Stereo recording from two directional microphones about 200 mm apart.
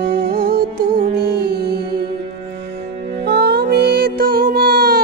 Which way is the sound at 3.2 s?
55° right (ahead or behind).